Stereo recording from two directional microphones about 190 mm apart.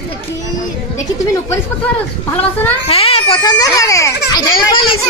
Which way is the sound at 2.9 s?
30° left (ahead or behind).